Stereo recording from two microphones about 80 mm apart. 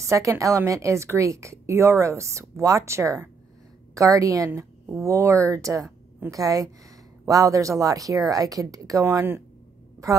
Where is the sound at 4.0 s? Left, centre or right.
Right.